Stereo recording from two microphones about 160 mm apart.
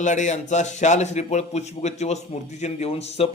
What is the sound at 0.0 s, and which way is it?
A man's voice, 50° left (ahead or behind).